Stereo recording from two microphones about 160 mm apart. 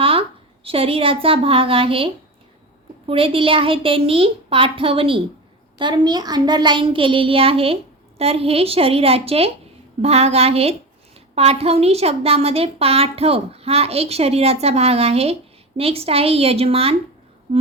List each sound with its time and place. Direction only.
0.0 s a woman's voice: 35° right (ahead or behind)
3.1 s a woman's voice: 35° right (ahead or behind)